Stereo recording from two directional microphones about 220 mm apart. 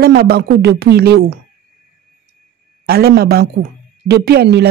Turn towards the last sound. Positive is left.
turn(degrees=-45)  # may be behind; listen again after turning